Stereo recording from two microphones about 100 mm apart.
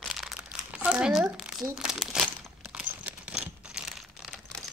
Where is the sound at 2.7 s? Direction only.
10° right (ahead or behind).